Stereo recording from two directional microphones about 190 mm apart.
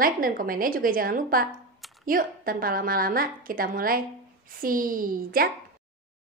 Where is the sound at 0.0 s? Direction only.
50° right (ahead or behind).